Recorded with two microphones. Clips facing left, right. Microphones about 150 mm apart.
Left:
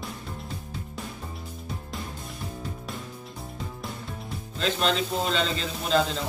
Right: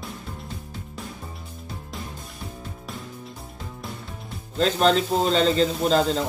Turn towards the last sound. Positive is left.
turn(degrees=-40)  # may be behind; listen again after turning